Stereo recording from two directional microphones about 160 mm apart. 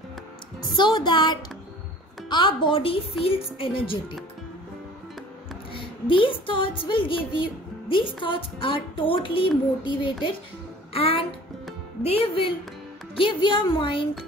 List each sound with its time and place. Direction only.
0.7 s speech: 30° left (ahead or behind)
5.7 s speech: 30° left (ahead or behind)
10.9 s music: 35° left (ahead or behind)
12.0 s speech: 35° left (ahead or behind)